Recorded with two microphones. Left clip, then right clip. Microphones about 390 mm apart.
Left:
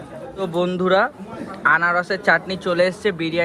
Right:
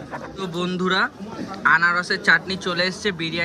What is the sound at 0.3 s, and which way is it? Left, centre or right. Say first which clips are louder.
A man's voice: left 6 dB; centre.